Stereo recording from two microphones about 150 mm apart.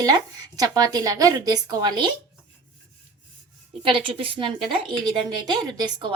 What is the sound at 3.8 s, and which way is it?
A woman's voice, 35° right (ahead or behind).